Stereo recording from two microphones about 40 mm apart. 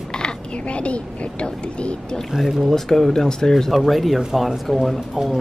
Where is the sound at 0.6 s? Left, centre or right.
Left.